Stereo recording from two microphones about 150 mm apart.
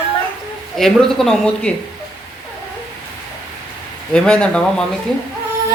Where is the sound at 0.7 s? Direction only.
Centre (ahead or behind).